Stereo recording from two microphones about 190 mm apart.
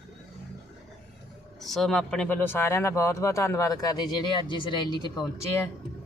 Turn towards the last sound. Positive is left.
turn(degrees=20)  # may be behind; listen again after turning